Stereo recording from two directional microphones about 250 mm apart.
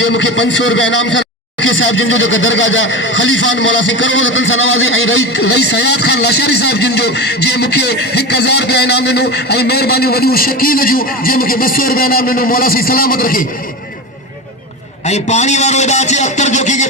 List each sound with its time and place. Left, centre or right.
0.1 s speech: left
15.0 s a man's voice: left